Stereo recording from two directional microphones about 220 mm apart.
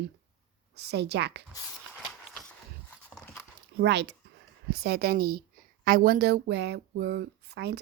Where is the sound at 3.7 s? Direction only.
50° right (ahead or behind).